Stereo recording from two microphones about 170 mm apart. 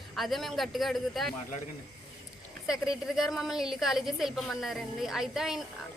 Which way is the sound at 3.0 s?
Centre (ahead or behind).